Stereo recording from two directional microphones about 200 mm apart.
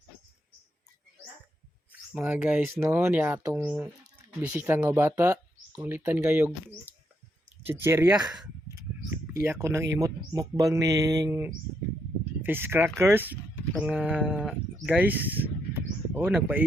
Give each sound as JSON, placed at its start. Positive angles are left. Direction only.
{"t": 2.1, "sound": "speech", "side_deg": -10}
{"t": 7.7, "sound": "speech", "side_deg": -10}